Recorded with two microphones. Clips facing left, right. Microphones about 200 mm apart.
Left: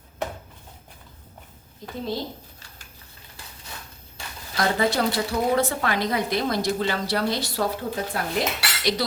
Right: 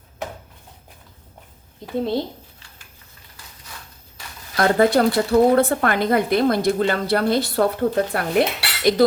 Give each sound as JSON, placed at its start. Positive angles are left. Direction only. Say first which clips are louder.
{"t": 2.0, "sound": "speech", "louder": "right 7 dB", "side_deg": -60}
{"t": 4.5, "sound": "speech", "louder": "right 7 dB", "side_deg": -55}